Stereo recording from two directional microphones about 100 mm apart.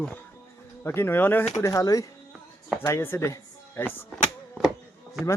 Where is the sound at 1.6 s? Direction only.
35° left (ahead or behind).